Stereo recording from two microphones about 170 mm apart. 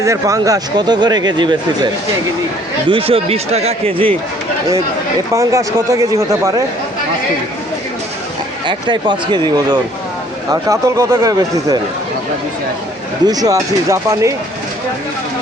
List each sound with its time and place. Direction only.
0.0 s speech: 20° right (ahead or behind)
2.9 s speech: 35° right (ahead or behind)
5.3 s speech: 15° right (ahead or behind)
8.6 s speech: 30° right (ahead or behind)
10.5 s speech: 20° right (ahead or behind)
13.2 s speech: 20° right (ahead or behind)